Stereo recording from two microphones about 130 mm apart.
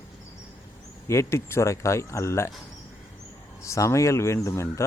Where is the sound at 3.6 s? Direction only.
25° left (ahead or behind).